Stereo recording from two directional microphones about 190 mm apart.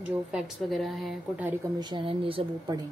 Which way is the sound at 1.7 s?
25° right (ahead or behind).